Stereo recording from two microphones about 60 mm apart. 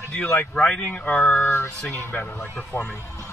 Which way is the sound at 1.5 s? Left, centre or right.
Left.